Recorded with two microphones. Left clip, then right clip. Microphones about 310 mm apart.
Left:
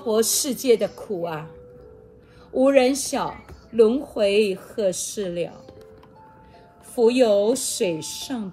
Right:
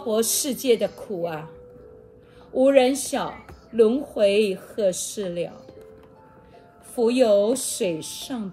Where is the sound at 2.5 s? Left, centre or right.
Left.